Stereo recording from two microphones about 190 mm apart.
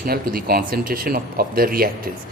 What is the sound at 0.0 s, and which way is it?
A man's voice, 50° right (ahead or behind).